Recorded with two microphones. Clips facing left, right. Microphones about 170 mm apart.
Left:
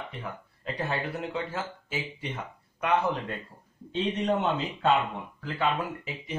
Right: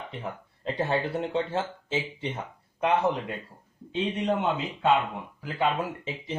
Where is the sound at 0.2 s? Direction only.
30° right (ahead or behind).